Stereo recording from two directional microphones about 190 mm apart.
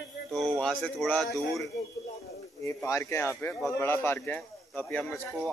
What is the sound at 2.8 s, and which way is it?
Speech, 15° left (ahead or behind).